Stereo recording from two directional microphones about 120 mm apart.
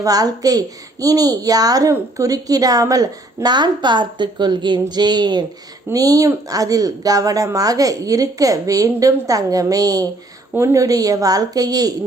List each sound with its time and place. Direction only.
0.0 s a woman's voice: 30° right (ahead or behind)